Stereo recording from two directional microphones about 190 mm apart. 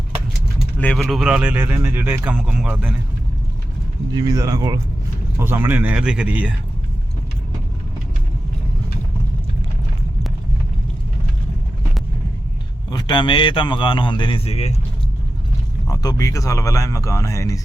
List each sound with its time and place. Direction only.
0.8 s speech: 5° left (ahead or behind)
4.1 s speech: 20° right (ahead or behind)
12.9 s a man's voice: 25° left (ahead or behind)
15.9 s speech: 20° left (ahead or behind)